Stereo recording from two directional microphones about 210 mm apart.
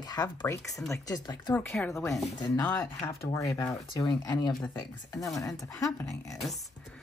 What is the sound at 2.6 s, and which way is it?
Speech, 10° left (ahead or behind).